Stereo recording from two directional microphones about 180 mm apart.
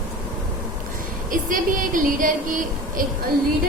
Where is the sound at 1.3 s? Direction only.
50° right (ahead or behind).